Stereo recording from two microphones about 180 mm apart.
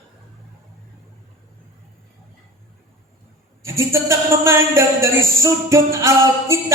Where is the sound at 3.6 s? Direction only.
15° right (ahead or behind).